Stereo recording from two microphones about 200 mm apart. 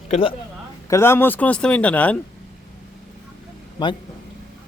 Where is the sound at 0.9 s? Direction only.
15° left (ahead or behind).